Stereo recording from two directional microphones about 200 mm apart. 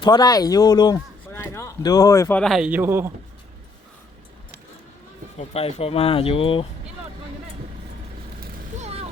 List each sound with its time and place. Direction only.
0.0 s speech: 20° left (ahead or behind)
2.4 s a man's voice: centre (ahead or behind)
5.4 s speech: 30° left (ahead or behind)
8.8 s a sound: 30° right (ahead or behind)